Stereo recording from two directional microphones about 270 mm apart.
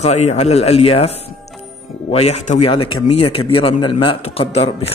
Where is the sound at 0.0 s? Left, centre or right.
Left.